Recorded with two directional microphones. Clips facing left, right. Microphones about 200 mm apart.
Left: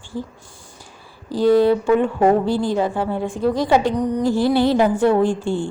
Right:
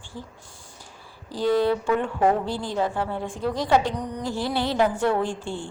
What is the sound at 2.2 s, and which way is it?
Speech, 40° left (ahead or behind).